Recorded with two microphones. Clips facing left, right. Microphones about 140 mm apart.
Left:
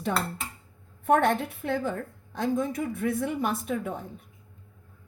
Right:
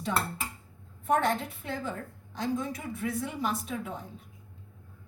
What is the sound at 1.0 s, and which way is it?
Speech, 60° left (ahead or behind).